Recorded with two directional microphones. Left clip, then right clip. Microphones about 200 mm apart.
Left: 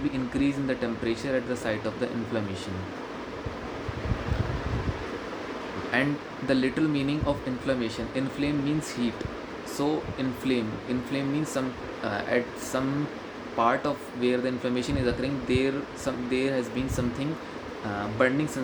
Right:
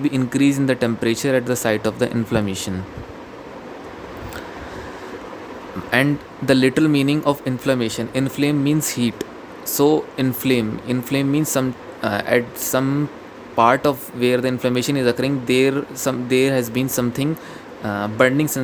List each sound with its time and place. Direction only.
0.1 s speech: 60° right (ahead or behind)
5.9 s speech: 55° right (ahead or behind)